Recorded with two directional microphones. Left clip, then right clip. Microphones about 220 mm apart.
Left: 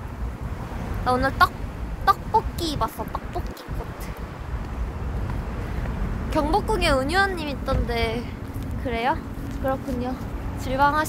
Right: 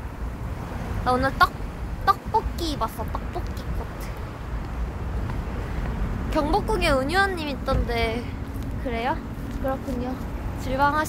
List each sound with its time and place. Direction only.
1.0 s speech: 5° left (ahead or behind)
6.3 s speech: 5° left (ahead or behind)
8.8 s speech: 15° left (ahead or behind)
10.7 s speech: 5° left (ahead or behind)